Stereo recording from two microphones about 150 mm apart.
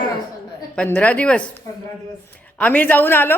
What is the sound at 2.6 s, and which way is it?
Speech, 10° left (ahead or behind).